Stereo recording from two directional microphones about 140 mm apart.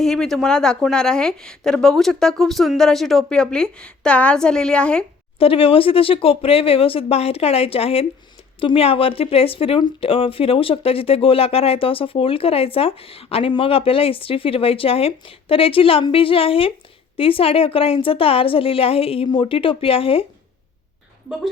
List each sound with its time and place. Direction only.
0.0 s speech: 5° left (ahead or behind)
5.4 s speech: 40° left (ahead or behind)